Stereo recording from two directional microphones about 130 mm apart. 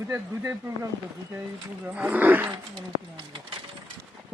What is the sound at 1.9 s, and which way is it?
Speech, 10° right (ahead or behind).